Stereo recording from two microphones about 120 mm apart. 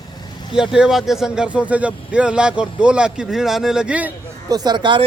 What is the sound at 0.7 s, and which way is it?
Speech, 5° right (ahead or behind).